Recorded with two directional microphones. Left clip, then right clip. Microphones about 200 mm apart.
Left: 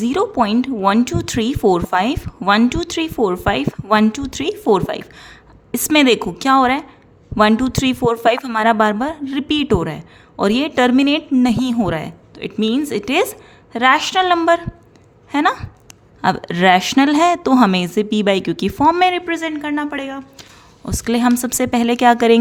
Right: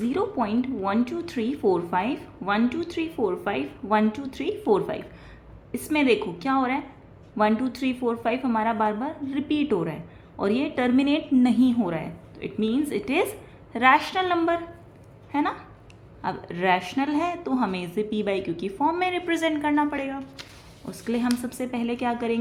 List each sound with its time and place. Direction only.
0.0 s a woman's voice: 40° left (ahead or behind)
20.8 s speech: 50° left (ahead or behind)